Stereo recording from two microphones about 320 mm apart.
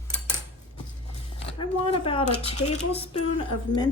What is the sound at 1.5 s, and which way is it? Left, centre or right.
Speech, centre.